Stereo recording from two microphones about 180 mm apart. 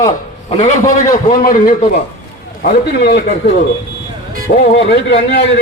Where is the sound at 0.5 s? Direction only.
40° left (ahead or behind).